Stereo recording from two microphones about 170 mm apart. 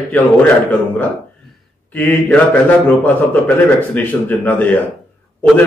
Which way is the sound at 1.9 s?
10° left (ahead or behind).